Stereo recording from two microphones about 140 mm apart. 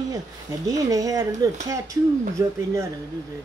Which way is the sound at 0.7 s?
25° right (ahead or behind).